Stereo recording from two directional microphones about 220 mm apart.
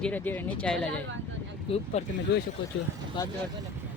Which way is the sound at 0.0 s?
10° left (ahead or behind).